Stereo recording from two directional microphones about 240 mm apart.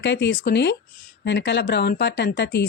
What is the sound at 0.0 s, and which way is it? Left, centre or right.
A woman's voice, left.